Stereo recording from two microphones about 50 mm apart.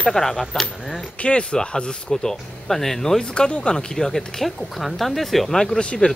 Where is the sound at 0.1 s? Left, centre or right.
Centre.